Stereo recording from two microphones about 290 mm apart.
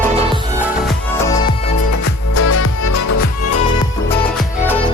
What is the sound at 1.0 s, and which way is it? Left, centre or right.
Music, centre.